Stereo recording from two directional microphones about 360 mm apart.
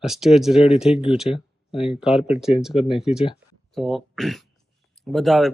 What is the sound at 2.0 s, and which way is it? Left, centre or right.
Speech, centre.